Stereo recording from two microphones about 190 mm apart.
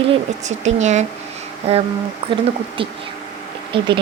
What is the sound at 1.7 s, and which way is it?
Speech, 35° right (ahead or behind).